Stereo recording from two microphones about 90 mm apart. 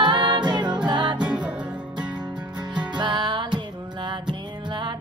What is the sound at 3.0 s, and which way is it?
Music, 55° right (ahead or behind).